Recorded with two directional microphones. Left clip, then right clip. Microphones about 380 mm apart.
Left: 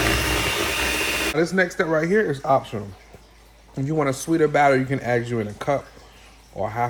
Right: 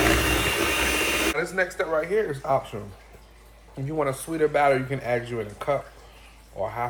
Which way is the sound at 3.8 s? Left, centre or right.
Left.